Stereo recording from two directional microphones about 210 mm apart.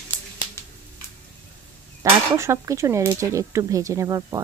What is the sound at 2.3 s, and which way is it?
Speech, 15° right (ahead or behind).